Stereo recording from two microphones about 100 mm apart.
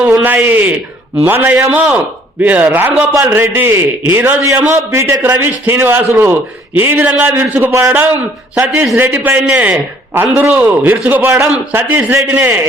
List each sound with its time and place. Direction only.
0.1 s a sound: 20° right (ahead or behind)
0.4 s a man's voice: 20° right (ahead or behind)
4.4 s a man's voice: 30° right (ahead or behind)